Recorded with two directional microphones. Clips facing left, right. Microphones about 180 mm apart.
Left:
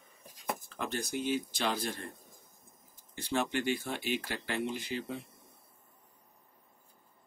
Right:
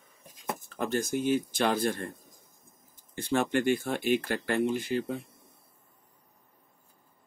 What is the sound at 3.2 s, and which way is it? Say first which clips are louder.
Speech: right 5 dB; 50° right (ahead or behind).